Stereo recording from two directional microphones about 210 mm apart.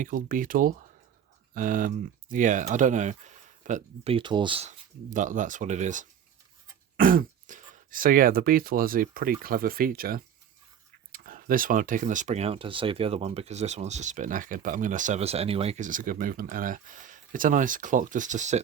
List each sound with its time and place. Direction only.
0.0 s speech: 40° right (ahead or behind); by 4.7 s 25° right (ahead or behind)
5.1 s speech: 40° right (ahead or behind)